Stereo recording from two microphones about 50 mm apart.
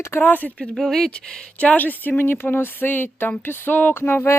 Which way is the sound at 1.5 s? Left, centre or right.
Left.